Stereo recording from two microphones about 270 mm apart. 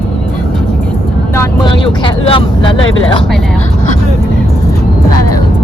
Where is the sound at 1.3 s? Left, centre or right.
Centre.